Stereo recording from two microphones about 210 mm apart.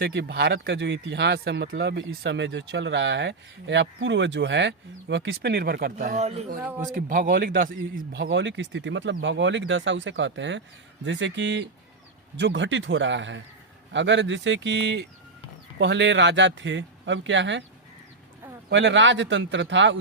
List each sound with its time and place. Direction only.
0.0 s speech: 55° right (ahead or behind)
6.1 s speech: 30° right (ahead or behind)
6.6 s speech: 10° right (ahead or behind)
6.9 s speech: 40° right (ahead or behind)
8.1 s speech: 55° right (ahead or behind)
18.7 s speech: 60° right (ahead or behind)